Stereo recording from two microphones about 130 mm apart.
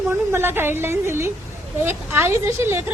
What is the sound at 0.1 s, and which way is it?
A woman's voice, 20° right (ahead or behind).